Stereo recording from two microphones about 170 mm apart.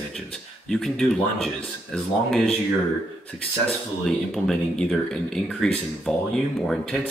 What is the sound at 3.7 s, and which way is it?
Speech, centre (ahead or behind).